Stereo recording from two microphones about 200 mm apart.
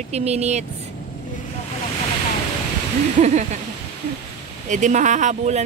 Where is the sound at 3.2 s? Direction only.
35° right (ahead or behind).